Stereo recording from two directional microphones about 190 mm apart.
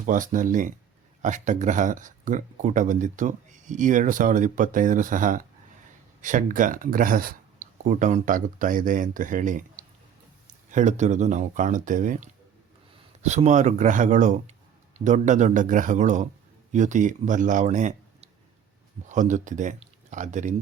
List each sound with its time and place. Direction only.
0.0 s speech: 45° right (ahead or behind)
19.0 s speech: 40° right (ahead or behind)